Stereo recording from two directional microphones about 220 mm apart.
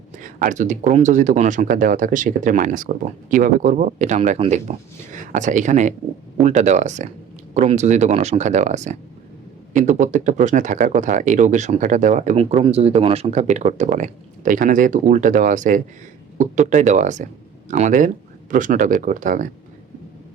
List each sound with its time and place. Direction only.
0.2 s speech: 40° right (ahead or behind)